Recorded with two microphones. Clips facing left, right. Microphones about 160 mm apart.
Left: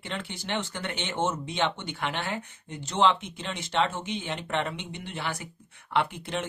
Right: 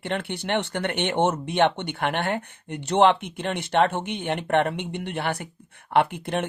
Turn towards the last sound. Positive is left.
turn(degrees=-55)  # may be behind; listen again after turning